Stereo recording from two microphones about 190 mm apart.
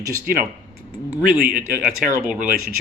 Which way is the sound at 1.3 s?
45° right (ahead or behind).